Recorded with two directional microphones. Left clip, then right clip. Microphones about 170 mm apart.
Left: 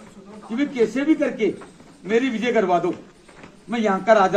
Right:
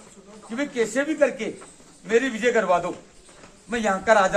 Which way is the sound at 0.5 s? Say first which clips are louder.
Left 3 dB; 25° right (ahead or behind).